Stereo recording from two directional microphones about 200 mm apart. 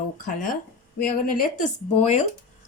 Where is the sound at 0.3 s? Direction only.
40° left (ahead or behind).